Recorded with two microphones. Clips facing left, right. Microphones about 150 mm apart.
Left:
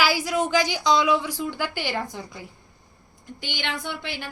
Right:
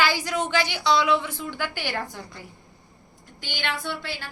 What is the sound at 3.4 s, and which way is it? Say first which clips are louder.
Speech: right 1 dB; 15° left (ahead or behind).